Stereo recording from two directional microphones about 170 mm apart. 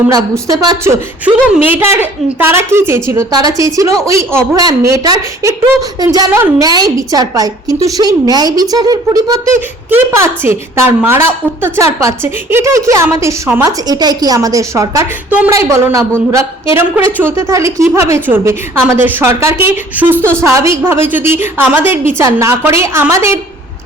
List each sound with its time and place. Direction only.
0.1 s a woman's voice: 25° right (ahead or behind)
1.5 s a woman's voice: 10° right (ahead or behind)
10.4 s a woman's voice: 15° right (ahead or behind)